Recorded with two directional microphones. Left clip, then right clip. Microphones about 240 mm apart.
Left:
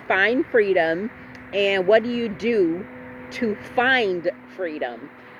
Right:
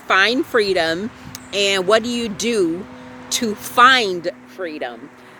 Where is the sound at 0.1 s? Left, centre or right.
Right.